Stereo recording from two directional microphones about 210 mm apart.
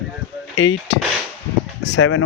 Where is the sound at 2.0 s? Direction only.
90° left.